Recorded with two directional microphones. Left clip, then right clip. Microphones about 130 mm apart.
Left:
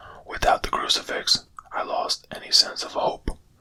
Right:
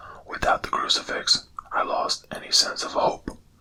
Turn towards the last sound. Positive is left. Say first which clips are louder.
# right 2 dB
turn(degrees=5)  # may be behind; listen again after turning